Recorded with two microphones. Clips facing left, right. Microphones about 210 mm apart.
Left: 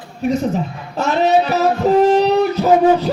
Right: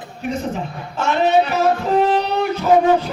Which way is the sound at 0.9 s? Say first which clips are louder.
Left 1 dB; 40° left (ahead or behind).